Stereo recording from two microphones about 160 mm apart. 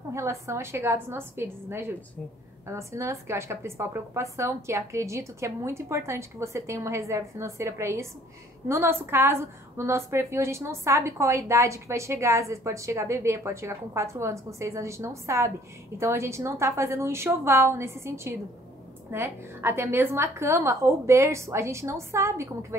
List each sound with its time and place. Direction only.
0.1 s a woman's voice: 15° right (ahead or behind)